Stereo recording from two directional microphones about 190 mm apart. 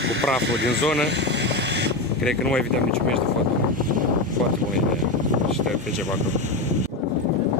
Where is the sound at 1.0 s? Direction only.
65° right (ahead or behind).